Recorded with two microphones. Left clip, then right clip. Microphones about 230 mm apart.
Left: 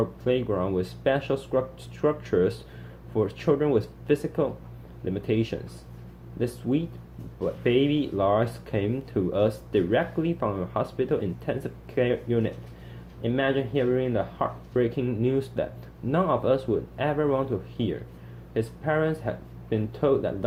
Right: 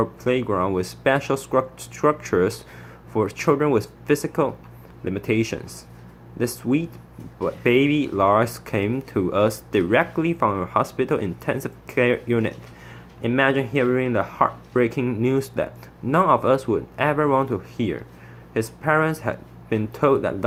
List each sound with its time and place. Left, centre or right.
0.0 s speech: right